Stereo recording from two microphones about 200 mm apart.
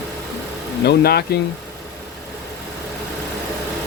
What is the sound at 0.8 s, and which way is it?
Speech, 55° left (ahead or behind).